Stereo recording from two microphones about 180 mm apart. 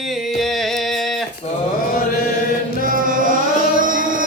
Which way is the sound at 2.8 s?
50° right (ahead or behind).